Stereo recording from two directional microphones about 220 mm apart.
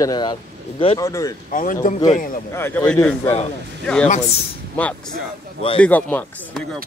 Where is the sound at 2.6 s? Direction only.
10° left (ahead or behind).